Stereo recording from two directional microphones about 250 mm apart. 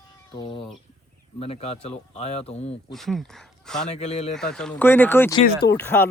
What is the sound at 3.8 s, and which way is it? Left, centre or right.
Speech, left.